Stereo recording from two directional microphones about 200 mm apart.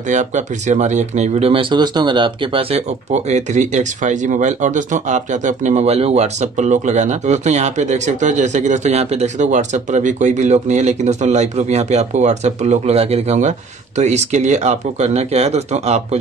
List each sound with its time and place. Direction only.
0.1 s speech: 35° right (ahead or behind)